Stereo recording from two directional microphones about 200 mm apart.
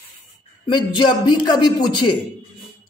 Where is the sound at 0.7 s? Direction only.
20° left (ahead or behind).